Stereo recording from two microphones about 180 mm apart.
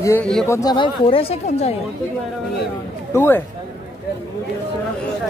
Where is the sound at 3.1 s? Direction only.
10° left (ahead or behind).